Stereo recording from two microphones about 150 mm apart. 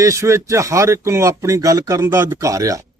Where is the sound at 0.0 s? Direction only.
20° right (ahead or behind).